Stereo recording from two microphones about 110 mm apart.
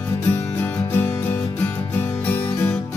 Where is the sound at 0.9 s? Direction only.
20° left (ahead or behind).